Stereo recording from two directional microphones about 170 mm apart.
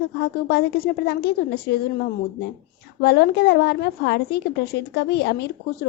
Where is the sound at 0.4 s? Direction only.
75° left (ahead or behind).